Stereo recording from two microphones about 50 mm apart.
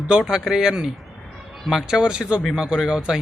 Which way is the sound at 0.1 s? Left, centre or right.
Centre.